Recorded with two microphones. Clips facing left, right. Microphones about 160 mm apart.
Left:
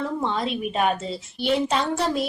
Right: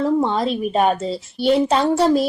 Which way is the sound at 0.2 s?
35° right (ahead or behind).